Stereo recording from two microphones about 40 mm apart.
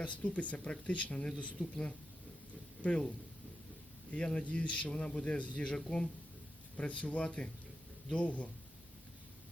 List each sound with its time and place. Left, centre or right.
0.0 s a man's voice: left
1.7 s speech: left
2.8 s a man's voice: left
4.1 s a man's voice: left
6.7 s a man's voice: left